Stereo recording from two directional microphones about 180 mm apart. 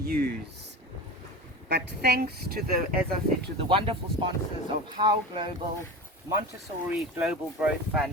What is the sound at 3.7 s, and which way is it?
Speech, 30° right (ahead or behind).